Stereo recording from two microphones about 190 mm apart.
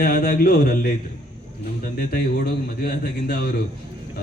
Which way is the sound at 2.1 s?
55° left (ahead or behind).